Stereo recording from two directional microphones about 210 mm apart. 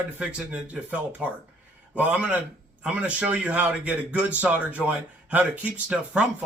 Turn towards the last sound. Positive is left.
turn(degrees=-5)  # may be behind; listen again after turning